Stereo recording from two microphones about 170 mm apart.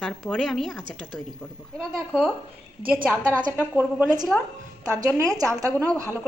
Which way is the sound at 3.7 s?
5° right (ahead or behind).